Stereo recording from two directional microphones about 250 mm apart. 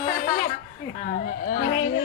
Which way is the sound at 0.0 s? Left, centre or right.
Left.